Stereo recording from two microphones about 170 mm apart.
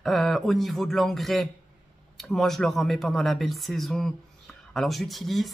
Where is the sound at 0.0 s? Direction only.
Centre (ahead or behind).